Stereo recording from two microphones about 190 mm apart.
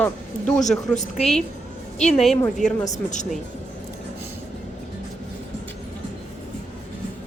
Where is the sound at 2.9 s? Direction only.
40° left (ahead or behind).